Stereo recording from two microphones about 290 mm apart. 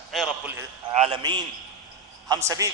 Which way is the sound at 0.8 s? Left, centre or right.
Centre.